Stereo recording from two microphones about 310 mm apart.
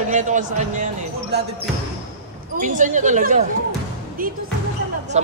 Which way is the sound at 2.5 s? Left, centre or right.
Right.